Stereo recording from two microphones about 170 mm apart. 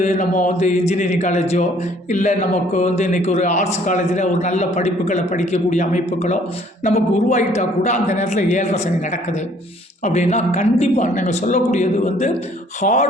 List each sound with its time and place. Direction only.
0.0 s a man's voice: 45° left (ahead or behind)
10.0 s a man's voice: 40° left (ahead or behind)